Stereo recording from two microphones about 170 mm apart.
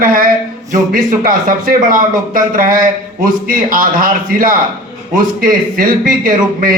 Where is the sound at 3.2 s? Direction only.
55° right (ahead or behind).